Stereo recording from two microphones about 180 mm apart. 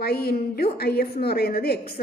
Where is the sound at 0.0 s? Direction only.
60° left (ahead or behind).